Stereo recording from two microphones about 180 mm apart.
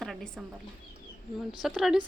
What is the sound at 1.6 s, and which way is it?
Speech, 5° right (ahead or behind).